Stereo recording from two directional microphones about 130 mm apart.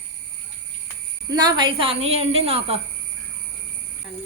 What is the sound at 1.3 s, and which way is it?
A woman's voice, 30° right (ahead or behind).